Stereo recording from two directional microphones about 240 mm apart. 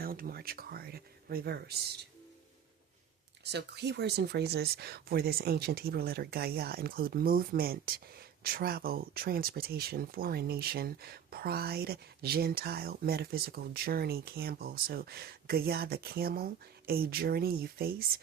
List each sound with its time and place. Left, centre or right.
0.0 s speech: right
3.5 s speech: right